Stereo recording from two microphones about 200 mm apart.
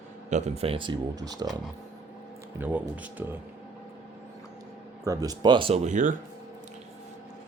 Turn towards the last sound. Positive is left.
turn(degrees=-35)  # may be behind; listen again after turning